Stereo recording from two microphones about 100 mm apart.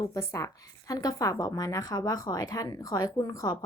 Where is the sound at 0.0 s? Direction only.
30° left (ahead or behind).